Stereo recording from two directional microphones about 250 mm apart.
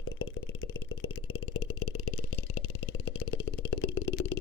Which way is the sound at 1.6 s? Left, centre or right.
Left.